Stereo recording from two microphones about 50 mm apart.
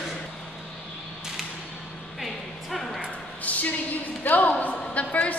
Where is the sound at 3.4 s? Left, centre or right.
Left.